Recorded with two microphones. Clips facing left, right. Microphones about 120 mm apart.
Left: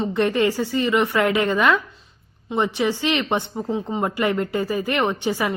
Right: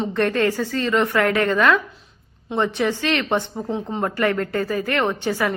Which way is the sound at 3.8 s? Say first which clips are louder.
Right 2 dB; 15° left (ahead or behind).